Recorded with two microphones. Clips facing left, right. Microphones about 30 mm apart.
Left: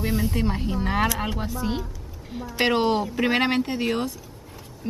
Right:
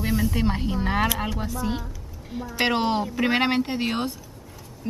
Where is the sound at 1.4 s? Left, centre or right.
Centre.